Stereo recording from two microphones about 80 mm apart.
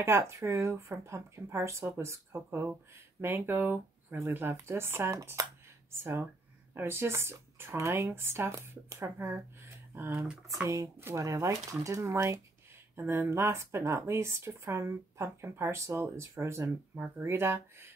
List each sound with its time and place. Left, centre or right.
0.0 s speech: right
6.7 s speech: right